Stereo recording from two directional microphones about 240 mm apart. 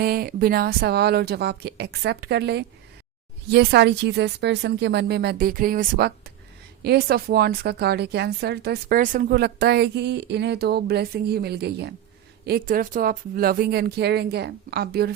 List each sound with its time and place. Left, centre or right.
0.0 s a woman's voice: right